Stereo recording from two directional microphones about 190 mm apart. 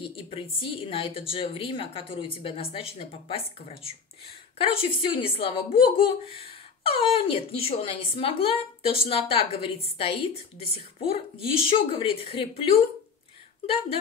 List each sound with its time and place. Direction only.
0.0 s speech: 30° left (ahead or behind)